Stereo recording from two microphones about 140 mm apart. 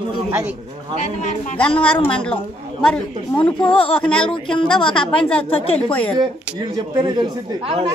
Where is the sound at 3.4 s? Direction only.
10° left (ahead or behind).